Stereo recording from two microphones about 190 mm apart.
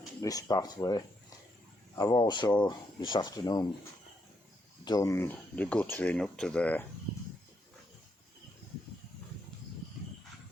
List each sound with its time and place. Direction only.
0.2 s speech: 20° left (ahead or behind)
4.9 s speech: 15° left (ahead or behind)